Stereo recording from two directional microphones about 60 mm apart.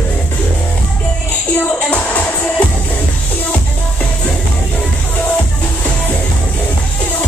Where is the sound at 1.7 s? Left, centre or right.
Left.